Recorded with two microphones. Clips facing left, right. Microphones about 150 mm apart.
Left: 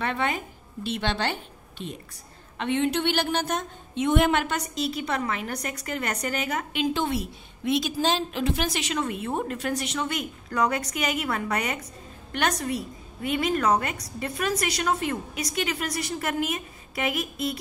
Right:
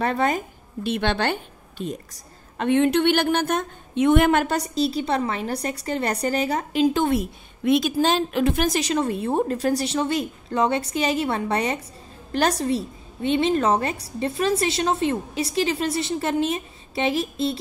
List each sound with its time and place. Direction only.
0.0 s a woman's voice: 40° right (ahead or behind)
0.8 s a woman's voice: 55° right (ahead or behind); by 17.6 s 30° right (ahead or behind)